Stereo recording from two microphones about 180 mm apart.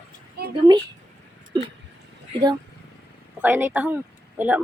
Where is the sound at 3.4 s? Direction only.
10° right (ahead or behind).